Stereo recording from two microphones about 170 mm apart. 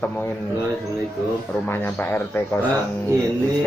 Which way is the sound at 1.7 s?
10° left (ahead or behind).